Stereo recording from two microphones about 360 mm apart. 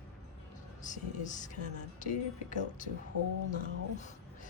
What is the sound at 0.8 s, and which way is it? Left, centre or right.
Speech, left.